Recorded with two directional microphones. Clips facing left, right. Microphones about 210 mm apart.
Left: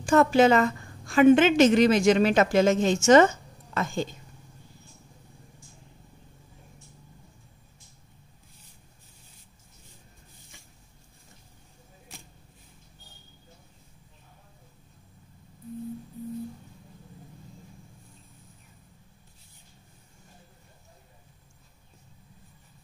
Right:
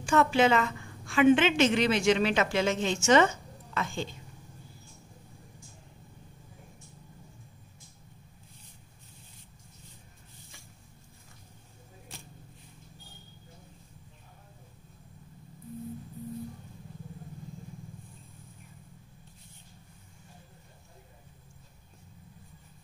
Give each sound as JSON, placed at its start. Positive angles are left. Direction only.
{"t": 0.0, "sound": "a woman's voice", "side_deg": 40}